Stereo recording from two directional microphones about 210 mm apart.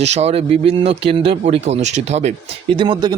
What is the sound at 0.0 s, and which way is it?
Speech, 30° right (ahead or behind).